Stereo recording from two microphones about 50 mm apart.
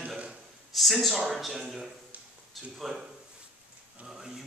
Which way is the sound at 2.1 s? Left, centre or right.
Right.